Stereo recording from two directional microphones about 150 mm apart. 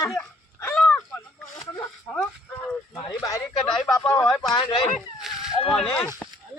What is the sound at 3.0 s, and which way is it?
Speech, 25° left (ahead or behind).